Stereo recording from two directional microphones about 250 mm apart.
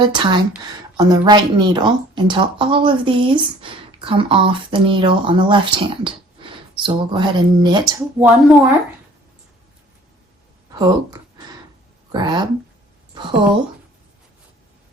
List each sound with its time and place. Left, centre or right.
0.0 s speech: centre
10.8 s speech: centre